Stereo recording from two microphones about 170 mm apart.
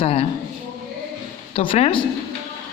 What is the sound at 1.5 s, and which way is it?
Speech, 35° left (ahead or behind).